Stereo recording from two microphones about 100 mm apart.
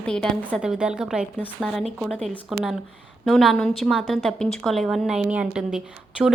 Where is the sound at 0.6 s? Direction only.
10° right (ahead or behind).